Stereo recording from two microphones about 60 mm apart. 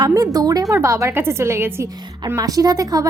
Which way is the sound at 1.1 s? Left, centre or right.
Right.